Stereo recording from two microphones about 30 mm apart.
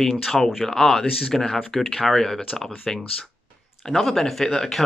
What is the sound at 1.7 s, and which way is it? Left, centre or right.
Speech, centre.